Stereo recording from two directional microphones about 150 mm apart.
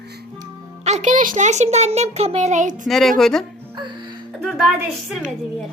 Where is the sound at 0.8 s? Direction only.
50° right (ahead or behind).